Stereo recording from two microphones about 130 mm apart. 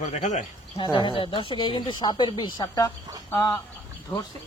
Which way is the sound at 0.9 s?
40° left (ahead or behind).